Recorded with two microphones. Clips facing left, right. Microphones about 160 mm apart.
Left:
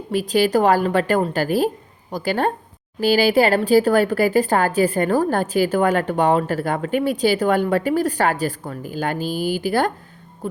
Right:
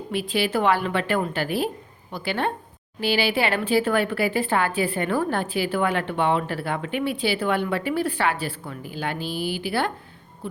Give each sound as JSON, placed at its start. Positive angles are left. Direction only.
{"t": 0.1, "sound": "speech", "side_deg": 40}